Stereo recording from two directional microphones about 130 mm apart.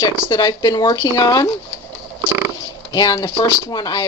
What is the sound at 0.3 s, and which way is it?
A woman's voice, 30° left (ahead or behind).